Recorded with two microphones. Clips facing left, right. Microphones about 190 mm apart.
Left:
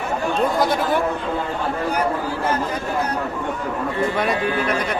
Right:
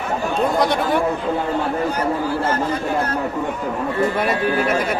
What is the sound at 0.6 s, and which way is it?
Speech, centre (ahead or behind).